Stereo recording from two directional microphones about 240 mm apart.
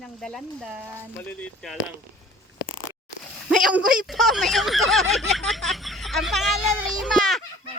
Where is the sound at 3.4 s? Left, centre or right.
Centre.